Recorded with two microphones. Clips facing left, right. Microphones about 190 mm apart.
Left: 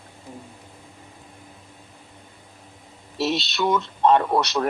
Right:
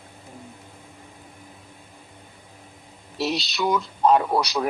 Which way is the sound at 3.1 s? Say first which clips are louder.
Left 2 dB; centre (ahead or behind).